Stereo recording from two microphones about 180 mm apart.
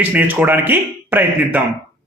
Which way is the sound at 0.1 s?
10° right (ahead or behind).